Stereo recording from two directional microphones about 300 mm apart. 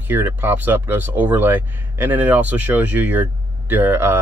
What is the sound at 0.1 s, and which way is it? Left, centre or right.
Speech, centre.